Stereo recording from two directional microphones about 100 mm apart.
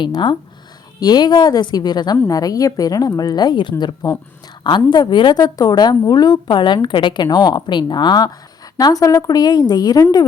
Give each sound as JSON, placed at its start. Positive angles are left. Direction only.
{"t": 0.0, "sound": "speech", "side_deg": 50}
{"t": 5.4, "sound": "a woman's voice", "side_deg": 40}